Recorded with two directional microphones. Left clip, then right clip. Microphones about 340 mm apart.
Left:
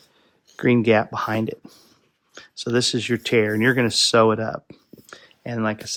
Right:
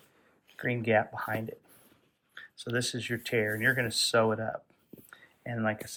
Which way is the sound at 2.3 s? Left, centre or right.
Centre.